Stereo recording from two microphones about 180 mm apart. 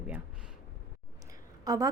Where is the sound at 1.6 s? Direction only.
20° right (ahead or behind).